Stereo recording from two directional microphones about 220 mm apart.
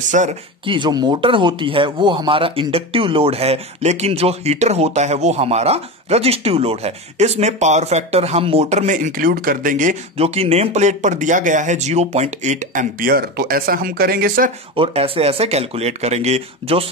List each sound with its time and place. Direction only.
0.1 s speech: 30° right (ahead or behind)
14.8 s speech: 25° right (ahead or behind)